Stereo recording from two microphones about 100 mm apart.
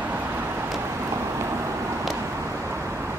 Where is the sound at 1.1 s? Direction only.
30° right (ahead or behind).